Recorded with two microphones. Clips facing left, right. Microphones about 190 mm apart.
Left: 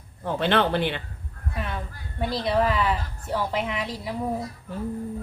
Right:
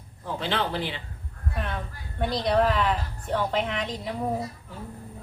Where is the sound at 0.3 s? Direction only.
60° left (ahead or behind).